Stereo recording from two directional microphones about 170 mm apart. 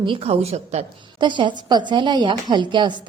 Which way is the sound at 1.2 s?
30° right (ahead or behind).